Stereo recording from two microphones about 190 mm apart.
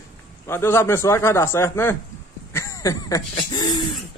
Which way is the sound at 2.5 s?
15° left (ahead or behind).